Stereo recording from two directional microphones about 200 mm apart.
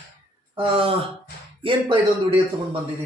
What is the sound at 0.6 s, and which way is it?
Speech, 30° right (ahead or behind).